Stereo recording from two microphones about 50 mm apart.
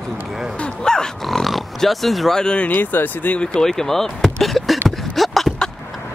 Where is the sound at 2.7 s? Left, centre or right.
Left.